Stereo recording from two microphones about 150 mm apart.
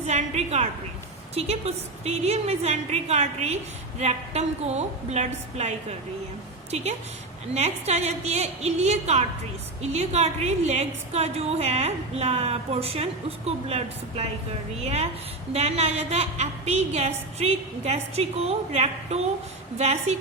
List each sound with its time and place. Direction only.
0.0 s a woman's voice: 45° right (ahead or behind)